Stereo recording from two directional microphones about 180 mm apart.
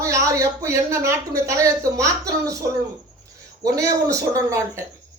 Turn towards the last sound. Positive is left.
turn(degrees=-15)  # may be behind; listen again after turning